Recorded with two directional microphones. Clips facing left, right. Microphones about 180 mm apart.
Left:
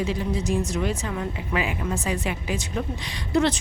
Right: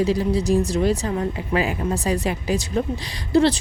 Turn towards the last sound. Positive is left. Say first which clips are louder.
# right 5 dB
turn(degrees=-35)  # may be behind; listen again after turning